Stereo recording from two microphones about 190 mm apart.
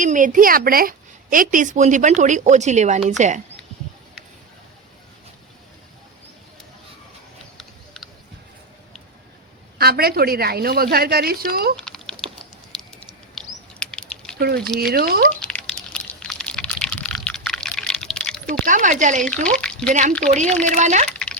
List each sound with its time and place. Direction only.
0.0 s a woman's voice: 45° right (ahead or behind)
7.6 s a sound: centre (ahead or behind)
9.7 s a woman's voice: 55° right (ahead or behind)
11.9 s typing: 5° left (ahead or behind)
12.7 s patter: 5° left (ahead or behind)
14.3 s a woman's voice: 55° right (ahead or behind)
15.4 s a sound: 5° left (ahead or behind)
18.6 s a woman's voice: 40° right (ahead or behind)
19.2 s speech: 5° left (ahead or behind)
19.9 s a woman's voice: 40° right (ahead or behind)